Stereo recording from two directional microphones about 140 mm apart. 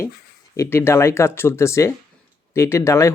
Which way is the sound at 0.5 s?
20° left (ahead or behind).